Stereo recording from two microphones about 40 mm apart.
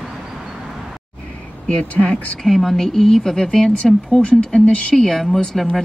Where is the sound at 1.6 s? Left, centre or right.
Left.